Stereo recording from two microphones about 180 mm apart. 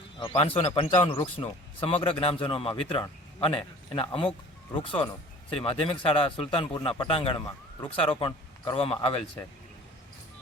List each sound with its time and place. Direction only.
0.2 s speech: 30° left (ahead or behind)